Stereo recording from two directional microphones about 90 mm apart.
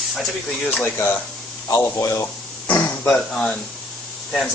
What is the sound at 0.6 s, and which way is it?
Speech, 20° left (ahead or behind).